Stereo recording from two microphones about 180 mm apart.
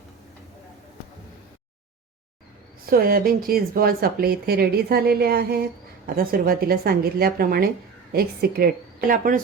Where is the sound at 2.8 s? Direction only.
55° right (ahead or behind).